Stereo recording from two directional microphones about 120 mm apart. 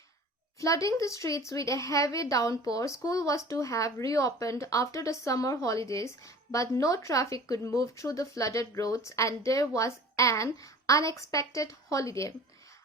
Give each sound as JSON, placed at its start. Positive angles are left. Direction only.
{"t": 0.6, "sound": "speech", "side_deg": 25}